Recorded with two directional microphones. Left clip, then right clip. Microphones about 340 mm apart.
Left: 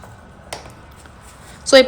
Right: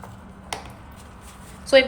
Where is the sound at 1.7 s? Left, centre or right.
Centre.